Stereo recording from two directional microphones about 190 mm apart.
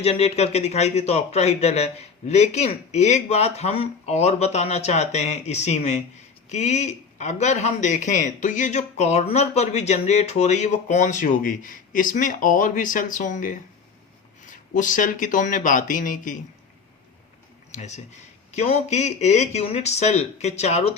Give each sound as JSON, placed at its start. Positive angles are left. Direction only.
{"t": 0.0, "sound": "speech", "side_deg": 30}
{"t": 17.7, "sound": "speech", "side_deg": 40}